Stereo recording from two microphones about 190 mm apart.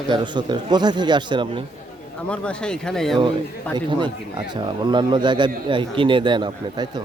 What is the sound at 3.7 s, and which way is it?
A man's voice, 25° right (ahead or behind).